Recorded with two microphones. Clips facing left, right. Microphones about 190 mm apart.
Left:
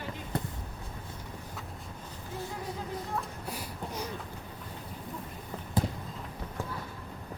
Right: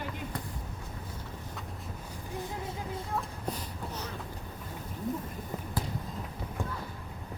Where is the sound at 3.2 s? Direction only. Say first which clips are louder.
Right 1 dB; 10° left (ahead or behind).